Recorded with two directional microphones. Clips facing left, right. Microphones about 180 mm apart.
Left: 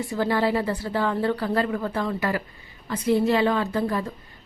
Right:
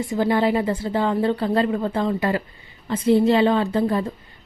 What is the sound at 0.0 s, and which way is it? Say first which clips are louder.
A woman's voice: right 3 dB; 20° right (ahead or behind).